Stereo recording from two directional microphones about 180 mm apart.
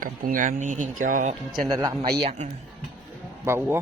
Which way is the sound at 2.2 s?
35° right (ahead or behind).